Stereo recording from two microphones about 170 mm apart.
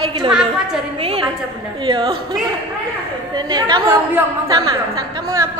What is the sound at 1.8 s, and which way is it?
Speech, 25° right (ahead or behind).